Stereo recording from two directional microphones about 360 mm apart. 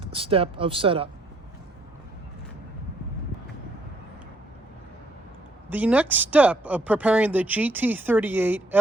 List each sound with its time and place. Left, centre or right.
0.0 s speech: centre
5.6 s speech: centre